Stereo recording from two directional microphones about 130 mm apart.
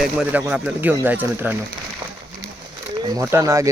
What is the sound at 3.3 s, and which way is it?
Speech, 25° right (ahead or behind).